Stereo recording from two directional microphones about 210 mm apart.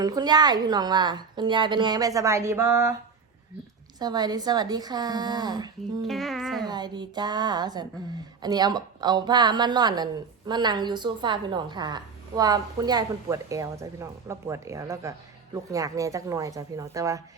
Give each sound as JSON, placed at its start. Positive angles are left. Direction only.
{"t": 0.0, "sound": "a woman's voice", "side_deg": -20}
{"t": 4.0, "sound": "a woman's voice", "side_deg": -20}
{"t": 6.0, "sound": "music", "side_deg": 0}
{"t": 6.7, "sound": "a woman's voice", "side_deg": -20}